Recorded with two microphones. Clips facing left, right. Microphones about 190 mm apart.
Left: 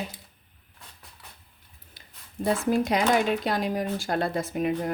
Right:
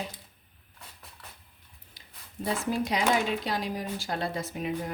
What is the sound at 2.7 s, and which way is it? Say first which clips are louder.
Speech: left 3 dB; 55° left (ahead or behind).